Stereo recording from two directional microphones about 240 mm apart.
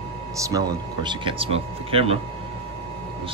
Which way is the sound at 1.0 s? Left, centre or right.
Right.